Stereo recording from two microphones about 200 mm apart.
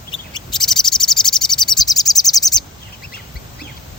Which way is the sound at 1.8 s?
20° left (ahead or behind).